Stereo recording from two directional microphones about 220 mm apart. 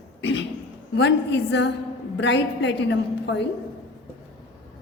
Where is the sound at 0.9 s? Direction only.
55° left (ahead or behind).